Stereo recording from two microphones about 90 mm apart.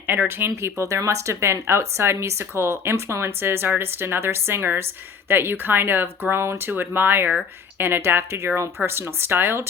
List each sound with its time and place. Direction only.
0.1 s speech: 25° right (ahead or behind)